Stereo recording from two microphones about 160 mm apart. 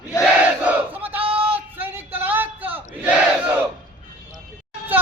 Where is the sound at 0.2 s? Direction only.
10° right (ahead or behind).